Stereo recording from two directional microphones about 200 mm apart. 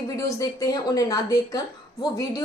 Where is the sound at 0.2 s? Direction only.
15° left (ahead or behind).